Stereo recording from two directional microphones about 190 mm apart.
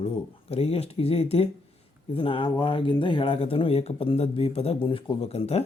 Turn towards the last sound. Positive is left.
turn(degrees=35)  # may be behind; listen again after turning